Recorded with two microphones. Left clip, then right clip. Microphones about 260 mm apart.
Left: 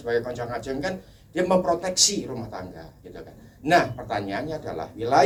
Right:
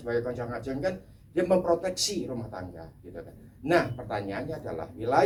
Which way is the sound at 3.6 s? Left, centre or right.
Left.